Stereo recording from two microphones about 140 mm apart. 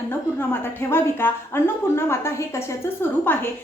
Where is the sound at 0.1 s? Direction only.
15° left (ahead or behind).